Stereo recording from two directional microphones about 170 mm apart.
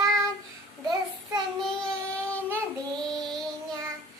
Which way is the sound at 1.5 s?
5° left (ahead or behind).